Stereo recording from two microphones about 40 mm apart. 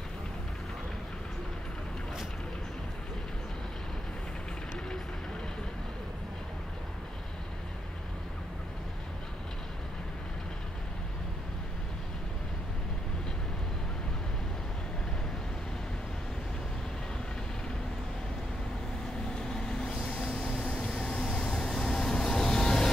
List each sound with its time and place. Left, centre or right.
19.3 s vehicle: centre